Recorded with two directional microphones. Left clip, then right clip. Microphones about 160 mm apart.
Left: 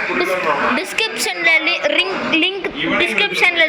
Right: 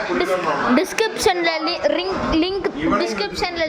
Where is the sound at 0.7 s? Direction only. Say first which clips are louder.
Even; 80° right.